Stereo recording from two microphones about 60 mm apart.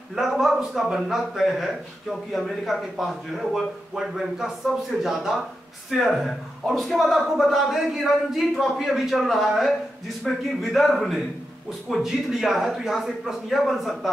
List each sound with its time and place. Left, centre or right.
0.1 s speech: centre